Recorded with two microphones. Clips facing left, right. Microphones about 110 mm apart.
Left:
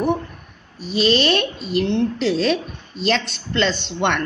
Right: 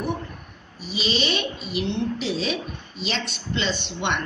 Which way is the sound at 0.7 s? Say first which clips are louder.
Left 8 dB; centre (ahead or behind).